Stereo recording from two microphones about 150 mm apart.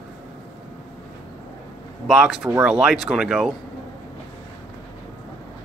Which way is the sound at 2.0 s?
5° right (ahead or behind).